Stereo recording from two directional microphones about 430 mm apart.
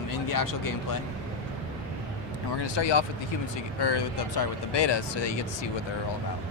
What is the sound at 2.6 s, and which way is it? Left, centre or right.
Speech, left.